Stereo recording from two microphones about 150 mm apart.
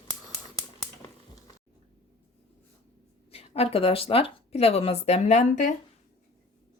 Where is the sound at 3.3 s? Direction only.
40° left (ahead or behind).